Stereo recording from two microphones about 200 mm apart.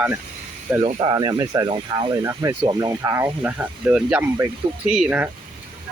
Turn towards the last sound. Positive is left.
turn(degrees=-10)  # may be behind; listen again after turning